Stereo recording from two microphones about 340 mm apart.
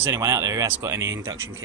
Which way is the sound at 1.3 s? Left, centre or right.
Right.